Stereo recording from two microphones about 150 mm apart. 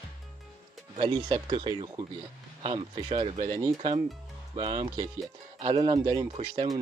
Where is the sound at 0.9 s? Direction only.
30° right (ahead or behind).